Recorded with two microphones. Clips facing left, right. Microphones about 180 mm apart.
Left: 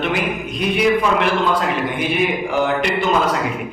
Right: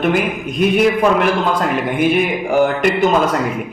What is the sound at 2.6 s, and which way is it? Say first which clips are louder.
Speech: right 3 dB; 50° right (ahead or behind).